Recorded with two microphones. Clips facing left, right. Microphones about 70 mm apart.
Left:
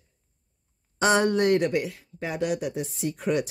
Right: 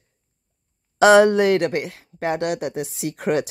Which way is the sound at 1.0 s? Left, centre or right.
Right.